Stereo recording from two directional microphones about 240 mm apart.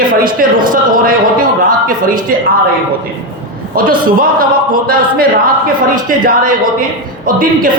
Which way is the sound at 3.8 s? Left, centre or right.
Right.